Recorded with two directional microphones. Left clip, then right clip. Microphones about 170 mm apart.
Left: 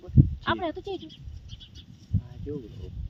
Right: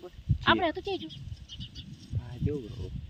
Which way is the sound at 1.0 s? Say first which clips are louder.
Right 2 dB; 60° left (ahead or behind).